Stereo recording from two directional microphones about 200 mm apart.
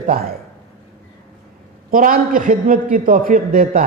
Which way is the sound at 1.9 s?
45° right (ahead or behind).